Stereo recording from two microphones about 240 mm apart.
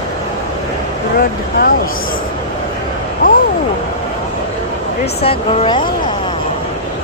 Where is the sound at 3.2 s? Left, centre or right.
Left.